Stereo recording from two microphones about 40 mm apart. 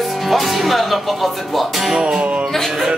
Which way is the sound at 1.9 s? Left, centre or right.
Centre.